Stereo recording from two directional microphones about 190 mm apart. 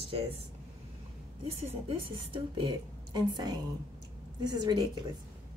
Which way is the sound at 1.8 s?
25° right (ahead or behind).